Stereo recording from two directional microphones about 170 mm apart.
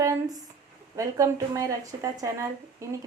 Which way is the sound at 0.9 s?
20° right (ahead or behind).